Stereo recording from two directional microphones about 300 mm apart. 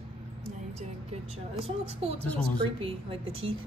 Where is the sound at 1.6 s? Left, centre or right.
Centre.